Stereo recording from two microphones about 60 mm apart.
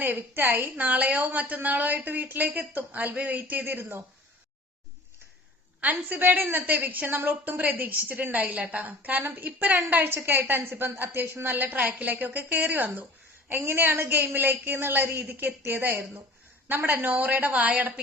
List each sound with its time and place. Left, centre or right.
0.2 s a woman's voice: right
0.8 s a woman's voice: right
5.8 s a woman's voice: right
11.4 s a woman's voice: right